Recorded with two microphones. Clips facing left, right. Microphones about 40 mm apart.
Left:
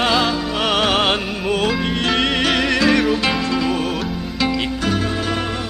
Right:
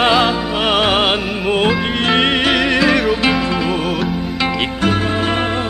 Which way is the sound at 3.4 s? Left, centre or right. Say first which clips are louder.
Right 2 dB; right.